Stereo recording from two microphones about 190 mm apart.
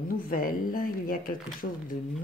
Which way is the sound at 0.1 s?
45° left (ahead or behind).